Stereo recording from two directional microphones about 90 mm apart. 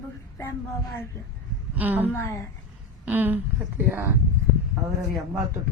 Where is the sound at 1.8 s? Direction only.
20° right (ahead or behind).